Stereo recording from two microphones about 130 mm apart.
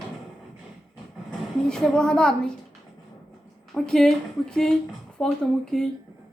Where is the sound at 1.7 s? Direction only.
5° left (ahead or behind).